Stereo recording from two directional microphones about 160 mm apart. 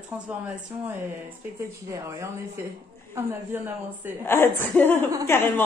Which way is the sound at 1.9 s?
15° right (ahead or behind).